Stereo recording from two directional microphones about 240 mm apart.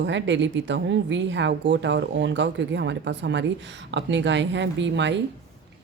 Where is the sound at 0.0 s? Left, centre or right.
Right.